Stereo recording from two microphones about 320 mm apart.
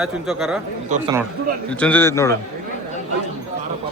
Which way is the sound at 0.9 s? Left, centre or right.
Right.